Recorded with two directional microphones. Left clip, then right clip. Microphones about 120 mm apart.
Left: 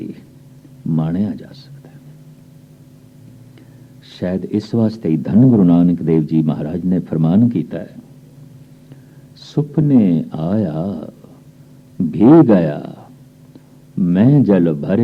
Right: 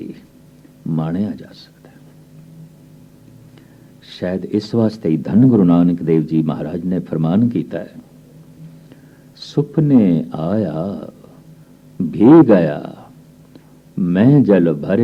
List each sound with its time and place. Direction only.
0.9 s speech: 25° left (ahead or behind)
4.1 s speech: 25° left (ahead or behind)
9.4 s speech: 25° left (ahead or behind)